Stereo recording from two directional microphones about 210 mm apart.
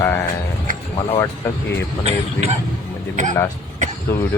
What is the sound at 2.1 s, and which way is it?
Speech, 30° right (ahead or behind).